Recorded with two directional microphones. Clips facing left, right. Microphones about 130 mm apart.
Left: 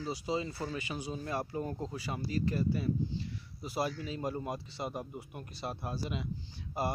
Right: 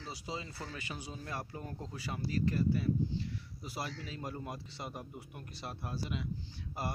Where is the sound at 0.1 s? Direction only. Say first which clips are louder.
Left 7 dB; 20° left (ahead or behind).